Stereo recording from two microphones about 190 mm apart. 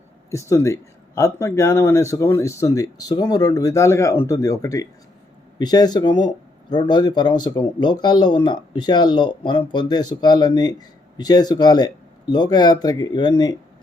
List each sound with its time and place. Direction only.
0.3 s speech: 15° left (ahead or behind)